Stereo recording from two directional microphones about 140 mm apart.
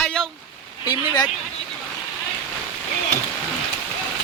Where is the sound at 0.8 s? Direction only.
30° left (ahead or behind).